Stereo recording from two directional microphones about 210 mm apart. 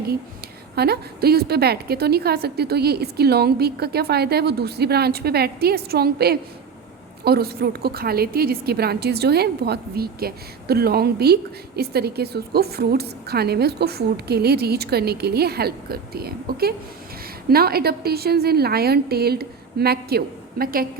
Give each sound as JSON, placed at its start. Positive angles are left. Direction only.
{"t": 0.8, "sound": "a woman's voice", "side_deg": -50}